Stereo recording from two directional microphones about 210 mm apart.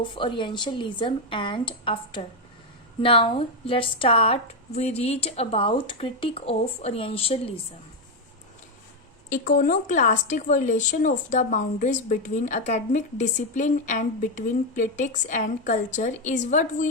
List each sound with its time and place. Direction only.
0.0 s a woman's voice: 25° left (ahead or behind)
9.3 s speech: 40° left (ahead or behind)